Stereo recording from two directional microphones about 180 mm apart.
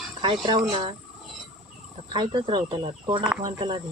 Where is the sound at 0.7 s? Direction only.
30° right (ahead or behind).